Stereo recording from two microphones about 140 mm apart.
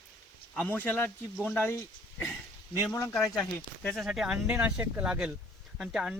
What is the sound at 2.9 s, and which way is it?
Speech, 20° left (ahead or behind).